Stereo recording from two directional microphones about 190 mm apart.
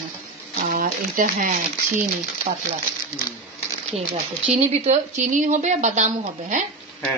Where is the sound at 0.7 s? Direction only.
45° right (ahead or behind).